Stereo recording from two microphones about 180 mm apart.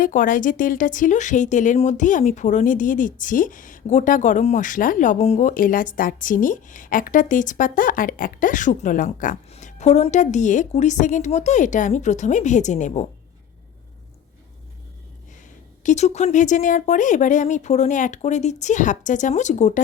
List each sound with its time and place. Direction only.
0.0 s a woman's voice: 50° left (ahead or behind)
15.8 s speech: 40° left (ahead or behind)